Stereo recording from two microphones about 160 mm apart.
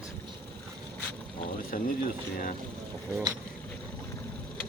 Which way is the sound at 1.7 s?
60° left (ahead or behind).